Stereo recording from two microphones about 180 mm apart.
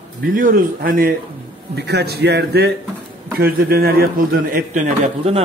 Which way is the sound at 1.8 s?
65° right (ahead or behind).